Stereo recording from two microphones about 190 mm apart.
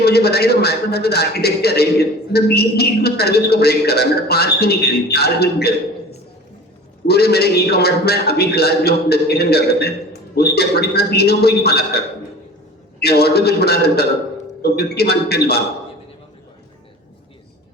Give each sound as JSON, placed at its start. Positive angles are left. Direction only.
{"t": 0.0, "sound": "a man's voice", "side_deg": 55}